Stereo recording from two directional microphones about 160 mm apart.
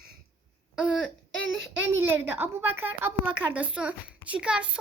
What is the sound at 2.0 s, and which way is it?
A woman's voice, 10° right (ahead or behind).